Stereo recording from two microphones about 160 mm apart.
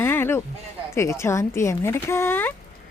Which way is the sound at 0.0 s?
15° left (ahead or behind).